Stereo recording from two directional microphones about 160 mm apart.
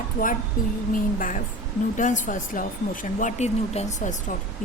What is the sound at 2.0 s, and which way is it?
A woman's voice, 55° left (ahead or behind).